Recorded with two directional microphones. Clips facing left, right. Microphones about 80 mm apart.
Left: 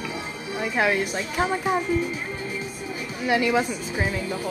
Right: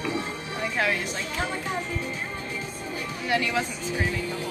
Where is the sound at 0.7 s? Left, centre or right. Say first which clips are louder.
Left 5 dB; centre.